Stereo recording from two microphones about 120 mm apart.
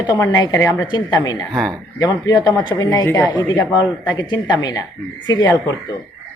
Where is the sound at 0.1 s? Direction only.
30° left (ahead or behind).